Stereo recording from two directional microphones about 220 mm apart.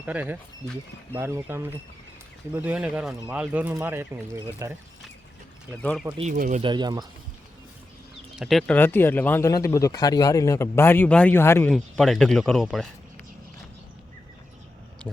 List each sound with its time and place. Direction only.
0.0 s speech: 5° right (ahead or behind)
5.8 s speech: 5° left (ahead or behind)
6.1 s speech: 35° right (ahead or behind)
6.6 s speech: 20° right (ahead or behind)
8.4 s speech: centre (ahead or behind)